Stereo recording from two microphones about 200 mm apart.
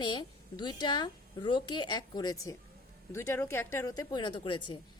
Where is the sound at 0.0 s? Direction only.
20° left (ahead or behind).